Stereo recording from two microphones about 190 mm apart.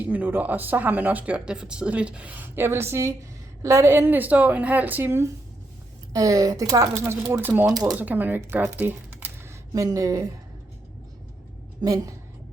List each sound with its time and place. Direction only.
0.0 s speech: 10° right (ahead or behind)
11.8 s a woman's voice: 20° right (ahead or behind)